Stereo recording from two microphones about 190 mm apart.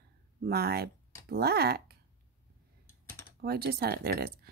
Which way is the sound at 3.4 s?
55° right (ahead or behind).